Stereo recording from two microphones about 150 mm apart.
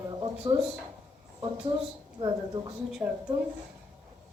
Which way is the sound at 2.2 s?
30° right (ahead or behind).